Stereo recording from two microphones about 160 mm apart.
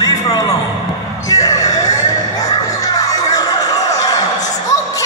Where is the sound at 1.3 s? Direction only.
20° left (ahead or behind).